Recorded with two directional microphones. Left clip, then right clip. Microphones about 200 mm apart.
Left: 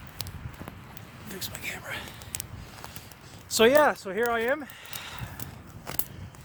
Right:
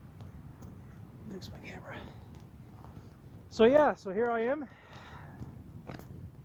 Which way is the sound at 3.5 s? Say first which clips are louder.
Left 4 dB; 50° left (ahead or behind).